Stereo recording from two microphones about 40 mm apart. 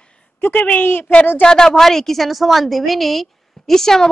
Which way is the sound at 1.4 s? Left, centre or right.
Centre.